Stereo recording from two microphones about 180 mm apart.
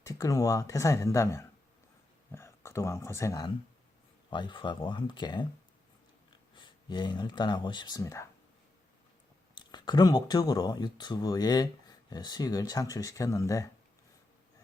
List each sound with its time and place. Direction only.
0.0 s speech: 20° left (ahead or behind)
6.5 s speech: 25° left (ahead or behind)
9.6 s speech: 25° left (ahead or behind)